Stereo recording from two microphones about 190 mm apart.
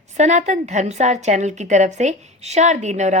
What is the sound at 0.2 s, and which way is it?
Speech, 40° right (ahead or behind).